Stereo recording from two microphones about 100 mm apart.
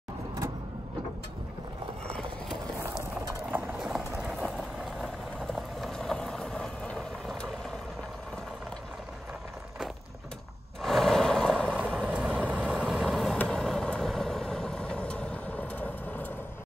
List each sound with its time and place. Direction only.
2.0 s a sound: 10° left (ahead or behind)
3.4 s clip-clop: 20° right (ahead or behind)
3.7 s clip-clop: 5° right (ahead or behind)
5.0 s boiling: centre (ahead or behind)
10.8 s a sound: 5° left (ahead or behind)
11.6 s vehicle: 15° right (ahead or behind); by 16.3 s 15° left (ahead or behind)